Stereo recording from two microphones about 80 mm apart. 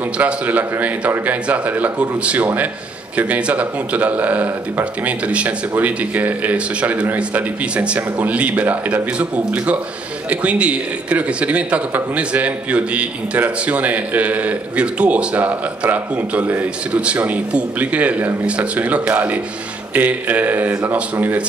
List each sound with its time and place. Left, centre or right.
0.2 s a man's voice: centre